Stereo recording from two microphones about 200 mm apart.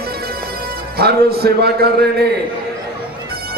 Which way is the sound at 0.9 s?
50° right (ahead or behind).